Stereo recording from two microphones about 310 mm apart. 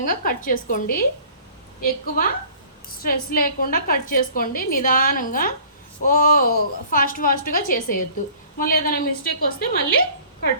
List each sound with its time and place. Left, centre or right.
0.0 s a woman's voice: left